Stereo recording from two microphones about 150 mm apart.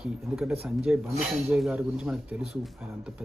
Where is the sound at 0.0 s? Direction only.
5° right (ahead or behind).